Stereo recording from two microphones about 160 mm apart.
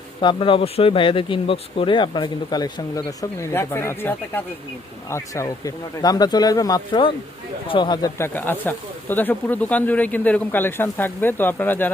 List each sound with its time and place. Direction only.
0.2 s speech: 30° left (ahead or behind)
8.2 s speech: 10° left (ahead or behind)